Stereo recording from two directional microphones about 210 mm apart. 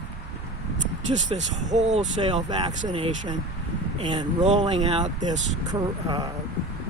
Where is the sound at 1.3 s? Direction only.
25° right (ahead or behind).